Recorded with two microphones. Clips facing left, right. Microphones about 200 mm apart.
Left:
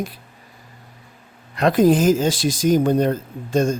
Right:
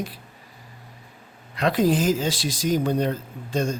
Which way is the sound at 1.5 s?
50° left (ahead or behind).